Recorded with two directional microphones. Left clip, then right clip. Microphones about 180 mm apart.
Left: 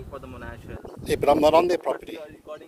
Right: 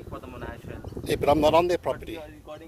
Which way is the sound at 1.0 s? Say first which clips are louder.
Left 2 dB; 20° left (ahead or behind).